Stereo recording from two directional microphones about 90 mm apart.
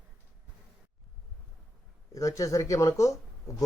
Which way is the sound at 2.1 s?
40° left (ahead or behind).